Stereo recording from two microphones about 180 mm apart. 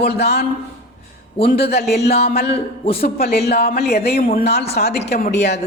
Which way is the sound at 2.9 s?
60° left (ahead or behind).